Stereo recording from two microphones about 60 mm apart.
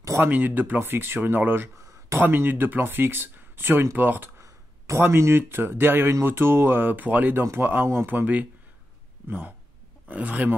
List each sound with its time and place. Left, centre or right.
0.2 s speech: right
4.4 s a sound: right
5.0 s speech: right
10.0 s speech: right